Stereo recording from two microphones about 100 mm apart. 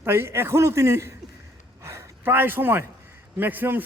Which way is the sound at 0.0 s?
25° right (ahead or behind).